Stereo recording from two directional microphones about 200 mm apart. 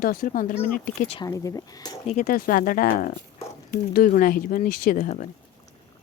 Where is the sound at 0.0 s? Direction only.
45° left (ahead or behind).